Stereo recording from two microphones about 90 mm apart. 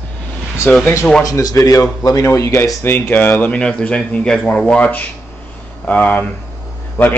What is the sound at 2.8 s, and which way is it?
A man's voice, 25° left (ahead or behind).